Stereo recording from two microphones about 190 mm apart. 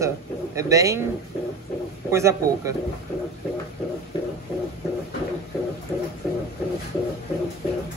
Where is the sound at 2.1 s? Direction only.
15° right (ahead or behind).